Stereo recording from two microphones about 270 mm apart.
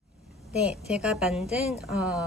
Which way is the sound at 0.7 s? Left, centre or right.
Centre.